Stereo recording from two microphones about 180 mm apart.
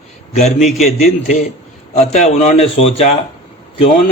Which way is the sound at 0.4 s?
40° left (ahead or behind).